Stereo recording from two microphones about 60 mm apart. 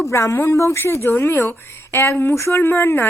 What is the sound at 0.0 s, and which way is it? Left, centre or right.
A woman's voice, left.